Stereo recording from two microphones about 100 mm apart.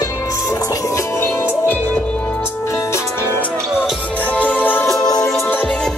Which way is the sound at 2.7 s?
30° left (ahead or behind).